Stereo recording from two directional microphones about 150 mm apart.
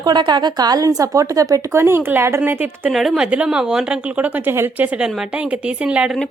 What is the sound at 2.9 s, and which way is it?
A woman's voice, centre (ahead or behind).